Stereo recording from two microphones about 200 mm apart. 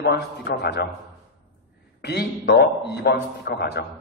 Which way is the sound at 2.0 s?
55° left (ahead or behind).